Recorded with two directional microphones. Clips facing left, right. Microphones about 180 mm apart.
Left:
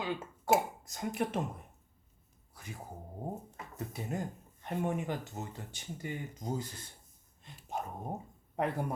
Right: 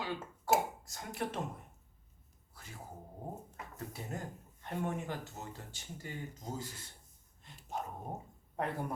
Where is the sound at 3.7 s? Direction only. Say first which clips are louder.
Left 5 dB; 15° left (ahead or behind).